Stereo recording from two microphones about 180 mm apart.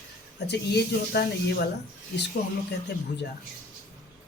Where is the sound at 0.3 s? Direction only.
70° left (ahead or behind).